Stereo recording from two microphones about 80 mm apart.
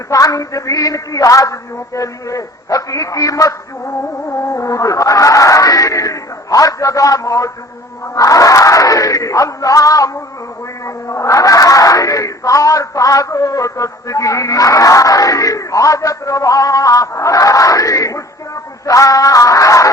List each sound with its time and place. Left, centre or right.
0.1 s speech: left
4.3 s a sound: left
8.1 s speech: left